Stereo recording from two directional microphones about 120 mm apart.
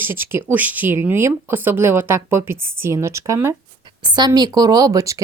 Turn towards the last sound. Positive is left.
turn(degrees=-30)  # may be behind; listen again after turning